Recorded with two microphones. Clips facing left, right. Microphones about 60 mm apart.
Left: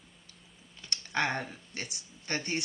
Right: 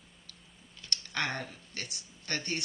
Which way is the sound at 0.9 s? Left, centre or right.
Left.